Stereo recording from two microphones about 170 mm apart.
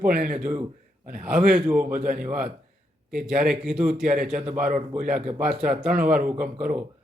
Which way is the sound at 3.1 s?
5° right (ahead or behind).